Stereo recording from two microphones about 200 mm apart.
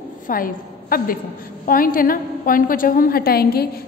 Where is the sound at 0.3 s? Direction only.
45° left (ahead or behind).